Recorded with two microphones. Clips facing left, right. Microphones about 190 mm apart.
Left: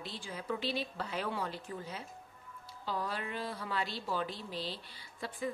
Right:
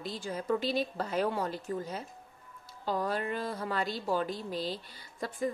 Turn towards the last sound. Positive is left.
turn(degrees=-45)  # may be behind; listen again after turning